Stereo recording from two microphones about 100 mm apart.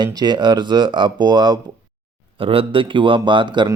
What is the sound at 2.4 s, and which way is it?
Speech, 65° right (ahead or behind).